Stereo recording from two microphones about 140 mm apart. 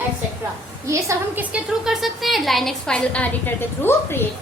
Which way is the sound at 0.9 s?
20° right (ahead or behind).